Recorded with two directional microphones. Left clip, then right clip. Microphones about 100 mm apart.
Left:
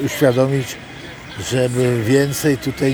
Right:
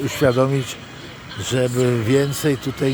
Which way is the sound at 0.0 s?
15° right (ahead or behind).